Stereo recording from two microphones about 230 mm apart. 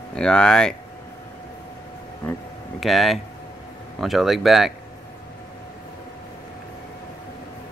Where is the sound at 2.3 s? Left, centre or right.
Centre.